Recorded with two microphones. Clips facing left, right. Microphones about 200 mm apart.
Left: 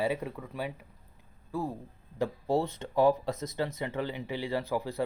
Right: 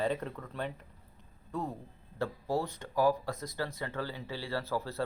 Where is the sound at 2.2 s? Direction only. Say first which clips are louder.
Left 4 dB; 25° left (ahead or behind).